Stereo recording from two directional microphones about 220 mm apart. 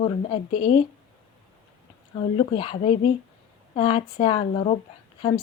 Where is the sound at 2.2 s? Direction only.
20° left (ahead or behind).